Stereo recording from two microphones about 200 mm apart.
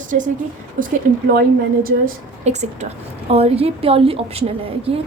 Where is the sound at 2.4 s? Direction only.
35° right (ahead or behind).